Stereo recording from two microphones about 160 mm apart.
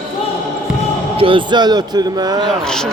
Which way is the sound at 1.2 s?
30° right (ahead or behind).